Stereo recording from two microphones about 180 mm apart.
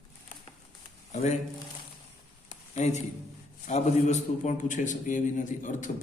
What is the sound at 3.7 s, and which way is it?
A man's voice, 40° left (ahead or behind).